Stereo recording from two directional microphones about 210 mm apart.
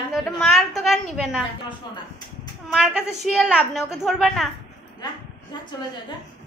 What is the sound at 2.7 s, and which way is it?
A woman's voice, centre (ahead or behind).